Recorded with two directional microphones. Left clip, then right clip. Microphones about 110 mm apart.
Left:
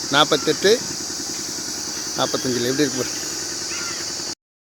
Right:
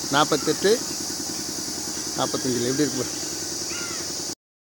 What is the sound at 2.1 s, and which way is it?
Speech, 5° left (ahead or behind).